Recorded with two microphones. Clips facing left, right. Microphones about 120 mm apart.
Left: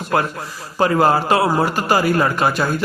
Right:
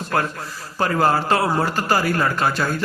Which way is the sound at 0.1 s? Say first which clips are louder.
Left 3 dB; 15° left (ahead or behind).